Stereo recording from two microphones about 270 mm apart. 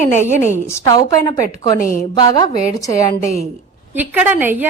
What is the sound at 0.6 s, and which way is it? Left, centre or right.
A woman's voice, centre.